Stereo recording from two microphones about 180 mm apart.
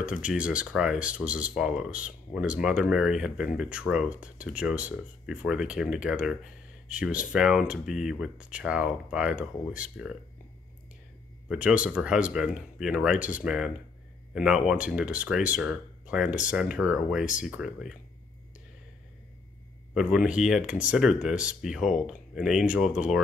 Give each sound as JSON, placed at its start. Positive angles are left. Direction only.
{"t": 0.0, "sound": "speech", "side_deg": -5}
{"t": 11.4, "sound": "speech", "side_deg": -5}
{"t": 19.9, "sound": "speech", "side_deg": -5}